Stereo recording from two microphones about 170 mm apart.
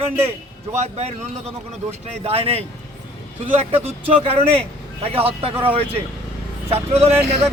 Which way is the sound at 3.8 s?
35° right (ahead or behind).